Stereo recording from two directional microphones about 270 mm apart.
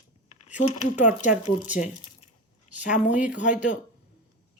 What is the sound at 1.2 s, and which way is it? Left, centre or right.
Speech, left.